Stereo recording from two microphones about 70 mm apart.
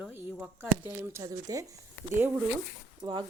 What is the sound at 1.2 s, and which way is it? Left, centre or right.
Speech, right.